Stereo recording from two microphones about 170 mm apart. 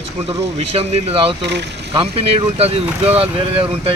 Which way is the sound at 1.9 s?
35° right (ahead or behind).